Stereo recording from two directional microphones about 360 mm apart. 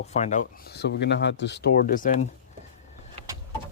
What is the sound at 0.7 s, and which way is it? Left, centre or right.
Speech, left.